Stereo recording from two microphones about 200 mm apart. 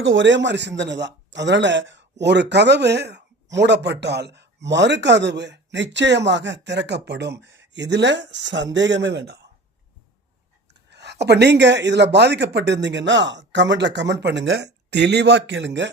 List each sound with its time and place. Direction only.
0.0 s speech: 65° right (ahead or behind)
10.8 s speech: 60° right (ahead or behind)